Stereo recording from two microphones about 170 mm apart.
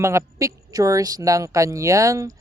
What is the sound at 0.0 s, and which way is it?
Speech, 15° right (ahead or behind).